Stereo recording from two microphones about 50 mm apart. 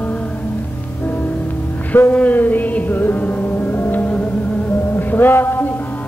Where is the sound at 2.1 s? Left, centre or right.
Left.